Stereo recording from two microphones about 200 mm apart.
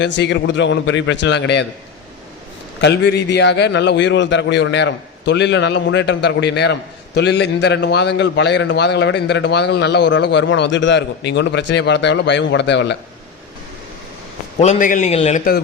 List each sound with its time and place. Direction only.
0.0 s a man's voice: 60° left (ahead or behind)
2.8 s a man's voice: 60° left (ahead or behind)
14.6 s a man's voice: 40° left (ahead or behind)